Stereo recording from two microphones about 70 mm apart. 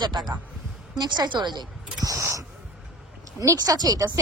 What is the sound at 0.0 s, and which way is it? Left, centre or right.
Speech, right.